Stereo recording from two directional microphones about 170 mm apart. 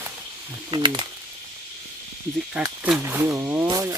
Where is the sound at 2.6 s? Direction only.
10° right (ahead or behind).